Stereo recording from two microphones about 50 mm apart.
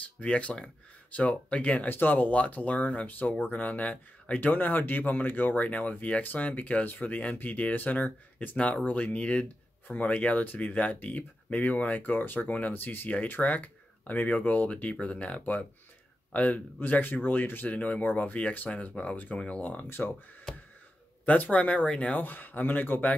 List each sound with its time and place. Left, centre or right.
0.2 s speech: left
1.9 s speech: left
21.3 s speech: left
22.1 s speech: left